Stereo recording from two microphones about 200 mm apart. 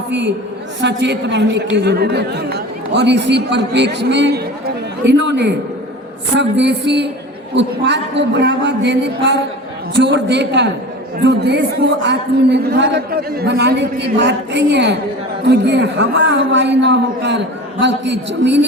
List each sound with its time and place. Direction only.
0.1 s a man's voice: 65° right (ahead or behind)